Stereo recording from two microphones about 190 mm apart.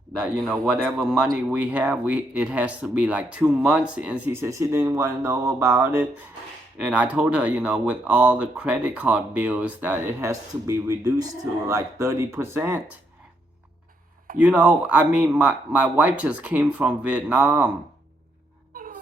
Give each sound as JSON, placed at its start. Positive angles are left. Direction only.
{"t": 0.1, "sound": "speech", "side_deg": 0}
{"t": 14.3, "sound": "speech", "side_deg": -5}
{"t": 18.7, "sound": "wail", "side_deg": -50}